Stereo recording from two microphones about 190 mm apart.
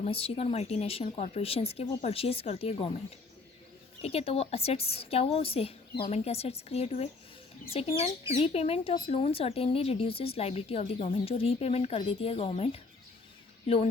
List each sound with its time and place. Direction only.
0.1 s speech: 30° left (ahead or behind)
4.0 s speech: 30° left (ahead or behind)